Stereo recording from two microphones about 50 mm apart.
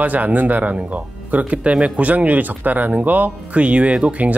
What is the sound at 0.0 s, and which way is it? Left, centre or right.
Speech, right.